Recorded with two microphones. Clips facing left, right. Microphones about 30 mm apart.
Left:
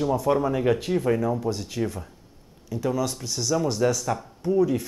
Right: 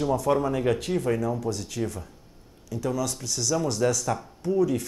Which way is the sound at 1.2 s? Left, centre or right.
Centre.